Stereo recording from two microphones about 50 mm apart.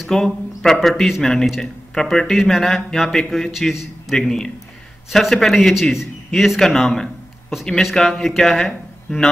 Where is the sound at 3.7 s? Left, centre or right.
Centre.